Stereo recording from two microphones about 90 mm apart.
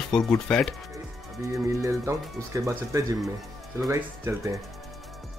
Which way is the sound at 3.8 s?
30° right (ahead or behind).